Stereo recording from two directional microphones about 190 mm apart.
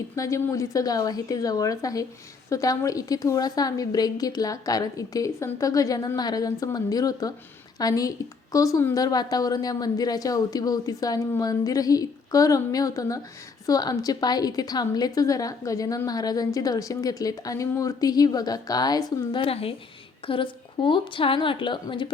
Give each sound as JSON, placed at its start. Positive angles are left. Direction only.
{"t": 0.2, "sound": "a woman's voice", "side_deg": 15}